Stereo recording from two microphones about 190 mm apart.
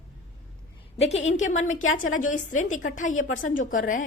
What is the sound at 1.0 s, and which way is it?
Speech, 35° left (ahead or behind).